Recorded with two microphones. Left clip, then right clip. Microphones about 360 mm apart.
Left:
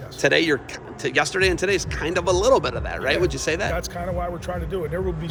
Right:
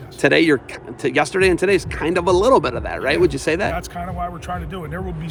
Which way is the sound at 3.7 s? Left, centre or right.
Centre.